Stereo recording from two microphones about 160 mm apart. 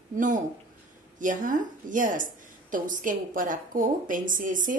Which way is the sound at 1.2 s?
55° right (ahead or behind).